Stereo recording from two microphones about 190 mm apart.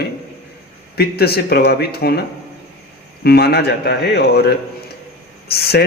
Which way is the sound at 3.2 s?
55° left (ahead or behind).